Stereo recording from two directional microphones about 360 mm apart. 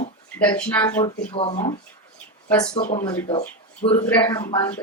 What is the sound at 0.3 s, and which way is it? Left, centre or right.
Speech, centre.